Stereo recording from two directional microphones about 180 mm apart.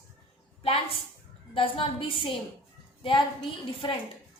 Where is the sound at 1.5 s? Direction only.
30° left (ahead or behind).